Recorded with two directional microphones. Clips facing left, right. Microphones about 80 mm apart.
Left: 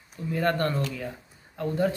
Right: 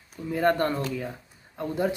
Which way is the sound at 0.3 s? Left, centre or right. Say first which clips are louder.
Right 2 dB; centre.